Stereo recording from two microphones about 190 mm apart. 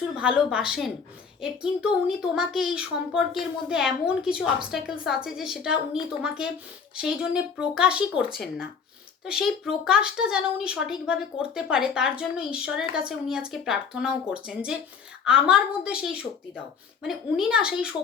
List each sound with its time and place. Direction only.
0.2 s speech: 5° right (ahead or behind)